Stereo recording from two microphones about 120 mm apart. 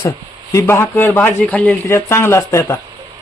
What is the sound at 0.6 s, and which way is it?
A man's voice, 20° left (ahead or behind).